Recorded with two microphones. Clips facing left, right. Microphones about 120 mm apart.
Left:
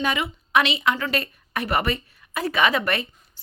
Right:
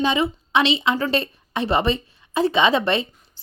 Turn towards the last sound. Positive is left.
turn(degrees=-25)  # may be behind; listen again after turning